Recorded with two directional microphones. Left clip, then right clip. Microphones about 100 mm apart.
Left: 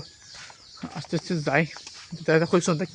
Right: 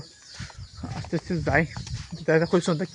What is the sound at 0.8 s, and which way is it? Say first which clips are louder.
Speech: even; centre (ahead or behind).